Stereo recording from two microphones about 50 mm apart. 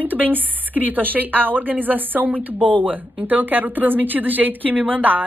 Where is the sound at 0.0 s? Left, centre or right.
Right.